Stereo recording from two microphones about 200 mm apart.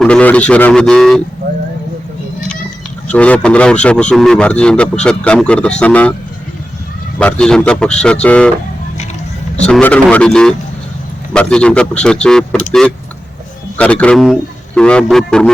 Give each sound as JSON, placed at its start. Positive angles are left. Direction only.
{"t": 0.0, "sound": "speech", "side_deg": 5}
{"t": 1.4, "sound": "a sound", "side_deg": -55}
{"t": 3.1, "sound": "speech", "side_deg": 5}
{"t": 7.2, "sound": "speech", "side_deg": 5}
{"t": 9.6, "sound": "speech", "side_deg": 5}